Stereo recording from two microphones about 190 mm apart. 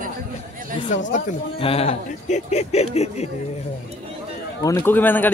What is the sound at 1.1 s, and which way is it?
A man's voice, 30° left (ahead or behind).